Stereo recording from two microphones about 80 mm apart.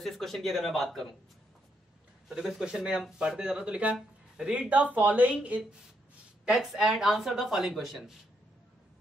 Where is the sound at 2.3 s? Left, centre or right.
Centre.